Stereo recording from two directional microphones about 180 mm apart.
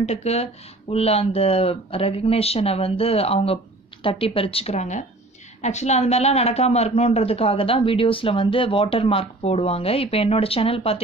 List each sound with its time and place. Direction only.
0.0 s a woman's voice: 35° left (ahead or behind)